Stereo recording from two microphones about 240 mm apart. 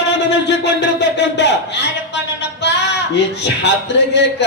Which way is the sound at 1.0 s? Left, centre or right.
Left.